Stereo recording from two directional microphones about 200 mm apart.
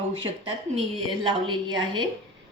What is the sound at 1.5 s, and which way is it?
Speech, 25° right (ahead or behind).